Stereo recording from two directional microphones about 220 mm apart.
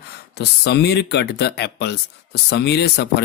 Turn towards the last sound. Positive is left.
turn(degrees=50)  # may be behind; listen again after turning